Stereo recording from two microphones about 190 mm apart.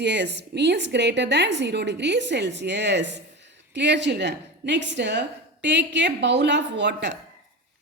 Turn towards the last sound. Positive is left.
turn(degrees=-70)  # may be behind; listen again after turning